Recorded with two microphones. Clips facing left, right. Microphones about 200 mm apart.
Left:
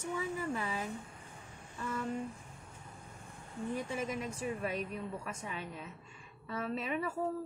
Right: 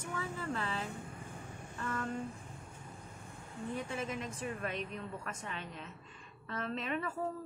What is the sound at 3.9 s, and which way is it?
A woman's voice, 10° left (ahead or behind).